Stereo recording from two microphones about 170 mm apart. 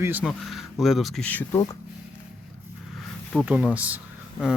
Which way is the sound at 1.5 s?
20° left (ahead or behind).